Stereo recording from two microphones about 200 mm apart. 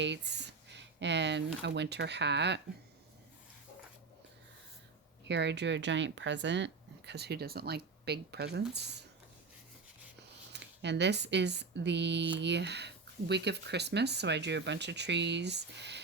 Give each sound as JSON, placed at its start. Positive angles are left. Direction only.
{"t": 0.0, "sound": "speech", "side_deg": -60}
{"t": 5.3, "sound": "speech", "side_deg": -60}
{"t": 10.5, "sound": "speech", "side_deg": -60}